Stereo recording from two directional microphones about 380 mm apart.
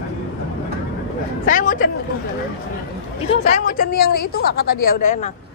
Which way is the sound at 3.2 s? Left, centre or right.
Centre.